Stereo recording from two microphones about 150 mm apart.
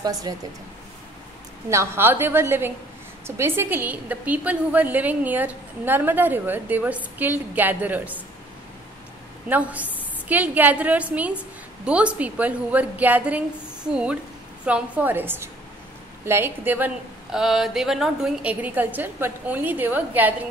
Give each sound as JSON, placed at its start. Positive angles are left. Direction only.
{"t": 0.0, "sound": "speech", "side_deg": -25}
{"t": 1.7, "sound": "a woman's voice", "side_deg": -15}
{"t": 9.5, "sound": "a woman's voice", "side_deg": -10}